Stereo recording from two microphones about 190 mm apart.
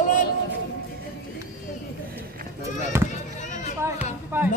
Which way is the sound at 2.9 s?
15° right (ahead or behind).